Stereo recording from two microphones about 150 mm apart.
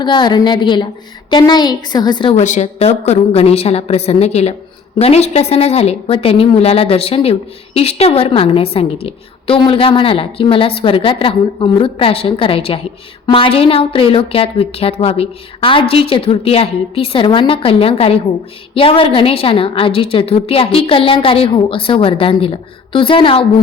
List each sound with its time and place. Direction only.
0.0 s a woman's voice: 30° left (ahead or behind)
2.3 s a woman's voice: 50° left (ahead or behind)